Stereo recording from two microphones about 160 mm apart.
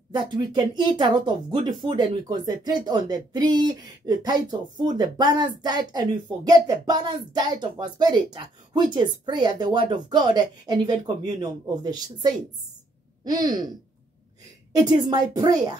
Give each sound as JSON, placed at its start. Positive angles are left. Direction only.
{"t": 0.1, "sound": "speech", "side_deg": -30}
{"t": 14.7, "sound": "speech", "side_deg": -25}